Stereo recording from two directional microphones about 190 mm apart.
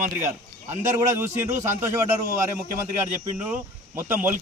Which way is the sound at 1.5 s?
40° right (ahead or behind).